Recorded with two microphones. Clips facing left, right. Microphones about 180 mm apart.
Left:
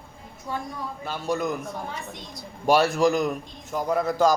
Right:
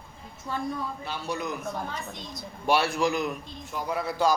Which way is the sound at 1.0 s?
45° left (ahead or behind).